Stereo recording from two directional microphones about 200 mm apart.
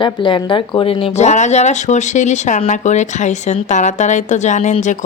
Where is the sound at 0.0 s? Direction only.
25° left (ahead or behind).